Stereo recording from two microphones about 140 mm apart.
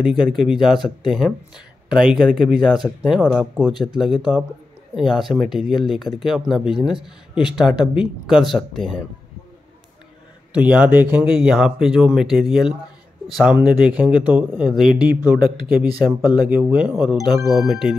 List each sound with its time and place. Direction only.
0.0 s speech: 5° right (ahead or behind)
10.5 s speech: 10° right (ahead or behind)
15.4 s speech: 90° right
16.0 s speech: 15° right (ahead or behind)